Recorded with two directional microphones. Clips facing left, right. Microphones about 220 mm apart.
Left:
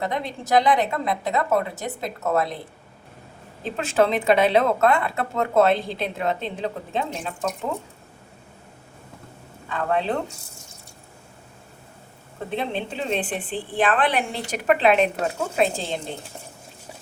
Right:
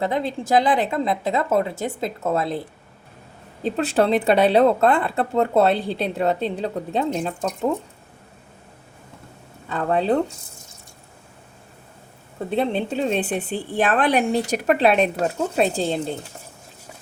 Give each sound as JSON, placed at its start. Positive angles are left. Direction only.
{"t": 0.0, "sound": "a woman's voice", "side_deg": -30}
{"t": 3.6, "sound": "speech", "side_deg": -35}
{"t": 9.6, "sound": "speech", "side_deg": -35}
{"t": 12.5, "sound": "speech", "side_deg": -40}